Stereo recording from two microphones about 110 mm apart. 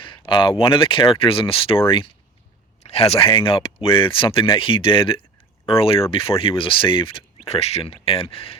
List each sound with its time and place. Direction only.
0.0 s speech: 45° left (ahead or behind)
2.8 s speech: 70° left (ahead or behind)